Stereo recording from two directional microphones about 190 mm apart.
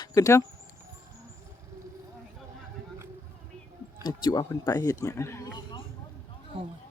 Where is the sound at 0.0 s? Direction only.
15° left (ahead or behind).